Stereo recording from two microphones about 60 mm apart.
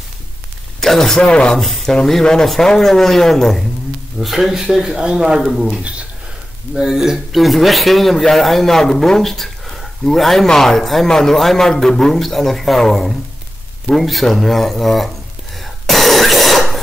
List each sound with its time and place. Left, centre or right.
0.7 s speech: centre
1.6 s speech: centre
5.8 s speech: centre
6.7 s speech: centre
15.6 s cough: centre